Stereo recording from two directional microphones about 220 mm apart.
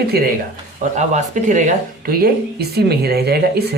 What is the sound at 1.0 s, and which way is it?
Speech, 35° right (ahead or behind).